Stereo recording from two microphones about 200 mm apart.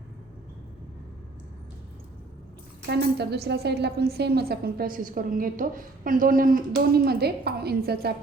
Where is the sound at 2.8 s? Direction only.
55° right (ahead or behind).